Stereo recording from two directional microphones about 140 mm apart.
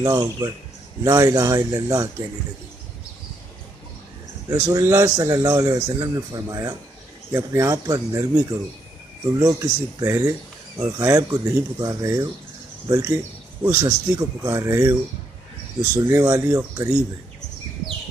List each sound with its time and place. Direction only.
0.0 s speech: 25° right (ahead or behind)
4.5 s speech: 25° right (ahead or behind)